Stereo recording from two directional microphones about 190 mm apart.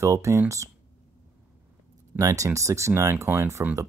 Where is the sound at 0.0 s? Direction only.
15° right (ahead or behind).